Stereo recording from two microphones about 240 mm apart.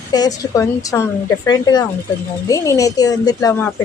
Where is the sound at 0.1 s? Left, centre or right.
Centre.